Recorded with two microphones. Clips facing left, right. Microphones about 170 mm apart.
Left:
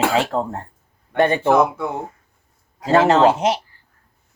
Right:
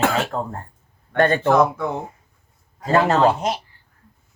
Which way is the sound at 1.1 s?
15° left (ahead or behind).